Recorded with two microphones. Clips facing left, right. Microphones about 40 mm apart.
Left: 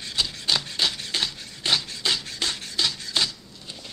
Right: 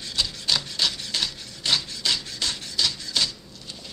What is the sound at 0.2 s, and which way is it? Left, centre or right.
Rub, centre.